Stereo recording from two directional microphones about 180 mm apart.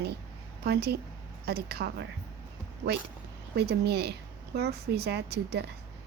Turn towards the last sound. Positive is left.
turn(degrees=-65)  # may be behind; listen again after turning